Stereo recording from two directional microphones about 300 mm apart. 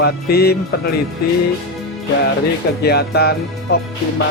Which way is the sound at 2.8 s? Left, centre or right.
Left.